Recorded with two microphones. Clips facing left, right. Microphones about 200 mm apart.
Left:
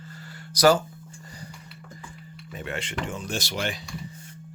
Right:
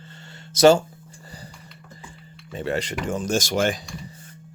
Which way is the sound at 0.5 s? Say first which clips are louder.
Right 5 dB; 25° right (ahead or behind).